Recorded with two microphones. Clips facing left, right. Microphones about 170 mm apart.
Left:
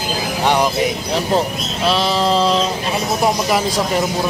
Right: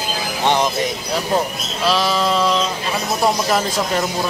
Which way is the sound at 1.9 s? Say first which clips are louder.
Left 1 dB; 25° left (ahead or behind).